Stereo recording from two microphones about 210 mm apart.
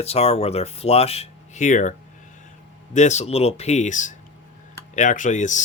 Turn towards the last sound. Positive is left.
turn(degrees=35)  # may be behind; listen again after turning